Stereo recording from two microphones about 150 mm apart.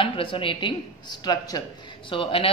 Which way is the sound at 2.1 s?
40° left (ahead or behind).